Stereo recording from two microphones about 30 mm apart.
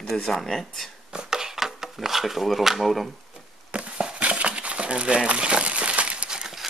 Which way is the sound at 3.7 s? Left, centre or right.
Right.